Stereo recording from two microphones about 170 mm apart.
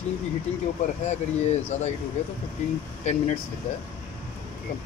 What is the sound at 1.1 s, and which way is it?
Speech, 40° left (ahead or behind).